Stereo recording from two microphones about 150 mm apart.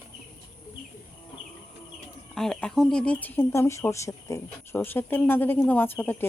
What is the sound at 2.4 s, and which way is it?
Speech, 5° left (ahead or behind).